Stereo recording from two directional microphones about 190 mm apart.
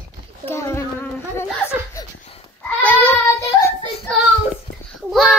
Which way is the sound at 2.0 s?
15° left (ahead or behind).